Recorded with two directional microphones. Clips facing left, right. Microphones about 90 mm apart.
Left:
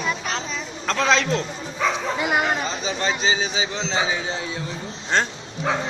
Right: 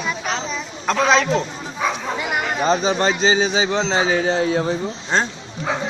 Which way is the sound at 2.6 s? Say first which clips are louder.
Right 7 dB; 45° right (ahead or behind).